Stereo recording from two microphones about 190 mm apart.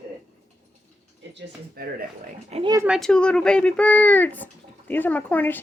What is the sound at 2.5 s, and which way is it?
Speech, 30° right (ahead or behind).